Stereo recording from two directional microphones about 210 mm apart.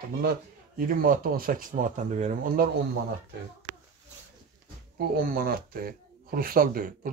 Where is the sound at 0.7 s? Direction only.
40° right (ahead or behind).